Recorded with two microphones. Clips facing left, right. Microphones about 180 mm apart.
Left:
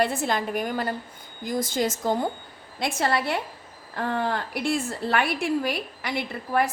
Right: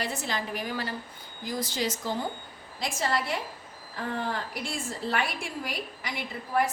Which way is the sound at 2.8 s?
65° left (ahead or behind).